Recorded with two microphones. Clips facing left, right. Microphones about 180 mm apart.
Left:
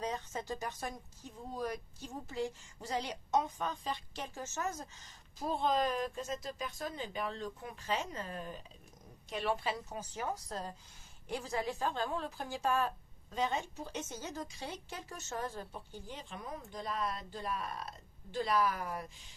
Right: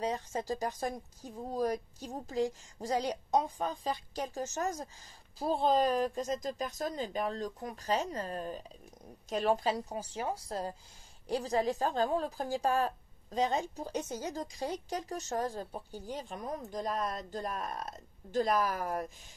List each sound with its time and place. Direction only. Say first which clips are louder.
0.0 s a woman's voice: right 4 dB; 30° right (ahead or behind)